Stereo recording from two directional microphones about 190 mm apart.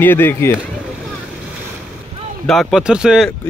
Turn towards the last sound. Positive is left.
turn(degrees=-5)  # may be behind; listen again after turning